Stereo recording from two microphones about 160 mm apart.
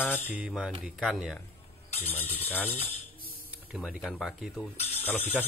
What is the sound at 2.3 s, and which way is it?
Speech, 10° left (ahead or behind).